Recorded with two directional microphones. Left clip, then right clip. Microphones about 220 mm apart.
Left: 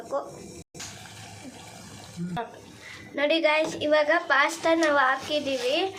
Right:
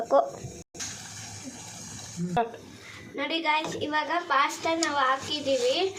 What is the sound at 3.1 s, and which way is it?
A woman's voice, 25° left (ahead or behind).